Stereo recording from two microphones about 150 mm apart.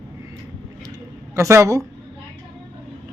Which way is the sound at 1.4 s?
20° right (ahead or behind).